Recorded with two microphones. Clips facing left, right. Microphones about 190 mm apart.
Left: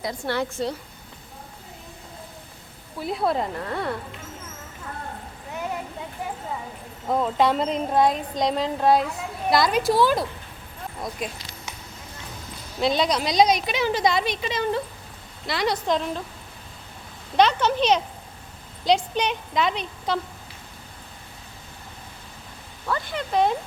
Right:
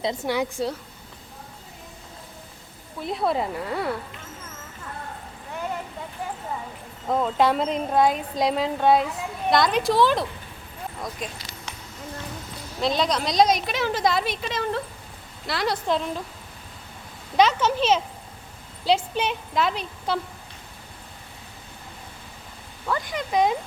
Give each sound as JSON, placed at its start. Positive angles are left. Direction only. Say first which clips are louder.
{"t": 0.0, "sound": "a woman's voice", "louder": "right 2 dB", "side_deg": -20}
{"t": 3.0, "sound": "speech", "louder": "even", "side_deg": 0}
{"t": 7.1, "sound": "speech", "louder": "even", "side_deg": 0}
{"t": 12.8, "sound": "speech", "louder": "left 1 dB", "side_deg": 0}
{"t": 17.3, "sound": "speech", "louder": "even", "side_deg": -5}
{"t": 22.9, "sound": "speech", "louder": "even", "side_deg": -10}